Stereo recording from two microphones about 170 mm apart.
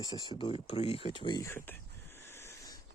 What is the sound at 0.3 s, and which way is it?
Speech, 30° left (ahead or behind).